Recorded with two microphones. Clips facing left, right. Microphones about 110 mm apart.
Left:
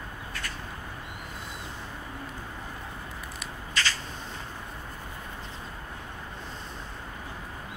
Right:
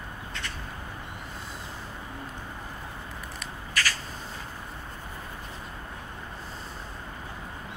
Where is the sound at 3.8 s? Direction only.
25° left (ahead or behind).